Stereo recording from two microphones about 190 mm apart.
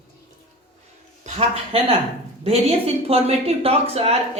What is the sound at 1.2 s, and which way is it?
A man's voice, 35° right (ahead or behind).